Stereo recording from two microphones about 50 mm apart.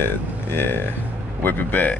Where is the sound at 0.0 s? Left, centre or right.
Left.